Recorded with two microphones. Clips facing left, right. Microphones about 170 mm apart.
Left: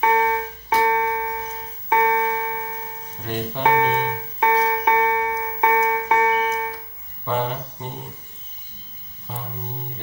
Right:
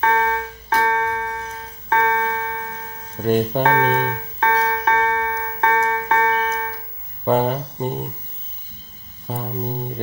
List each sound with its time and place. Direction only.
0.0 s music: 15° left (ahead or behind)
3.2 s speech: 45° right (ahead or behind)
3.6 s keyboard: 15° left (ahead or behind)
7.2 s speech: 45° right (ahead or behind)
9.3 s music: 40° right (ahead or behind)